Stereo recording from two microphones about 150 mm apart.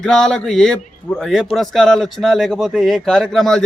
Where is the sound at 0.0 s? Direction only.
5° left (ahead or behind).